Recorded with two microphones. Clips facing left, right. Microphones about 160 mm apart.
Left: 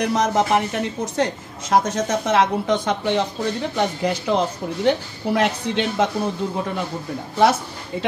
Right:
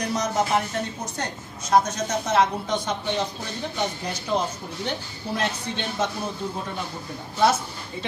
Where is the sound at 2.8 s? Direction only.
90° left.